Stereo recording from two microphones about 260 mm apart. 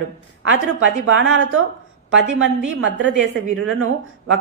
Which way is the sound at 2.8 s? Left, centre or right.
Right.